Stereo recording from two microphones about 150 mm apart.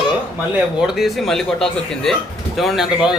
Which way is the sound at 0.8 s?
5° right (ahead or behind).